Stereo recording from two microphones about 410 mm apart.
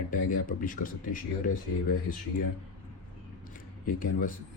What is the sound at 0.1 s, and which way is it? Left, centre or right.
Speech, centre.